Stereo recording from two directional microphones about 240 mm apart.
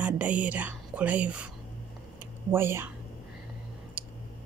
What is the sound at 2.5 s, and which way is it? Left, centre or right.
Speech, centre.